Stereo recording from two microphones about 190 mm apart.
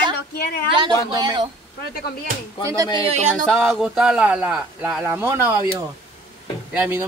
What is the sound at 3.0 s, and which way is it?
Music, 40° right (ahead or behind).